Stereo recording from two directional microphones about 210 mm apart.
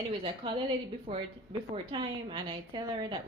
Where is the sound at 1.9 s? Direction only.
25° right (ahead or behind).